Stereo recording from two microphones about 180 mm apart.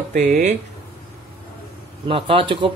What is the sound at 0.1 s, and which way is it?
Speech, 40° right (ahead or behind).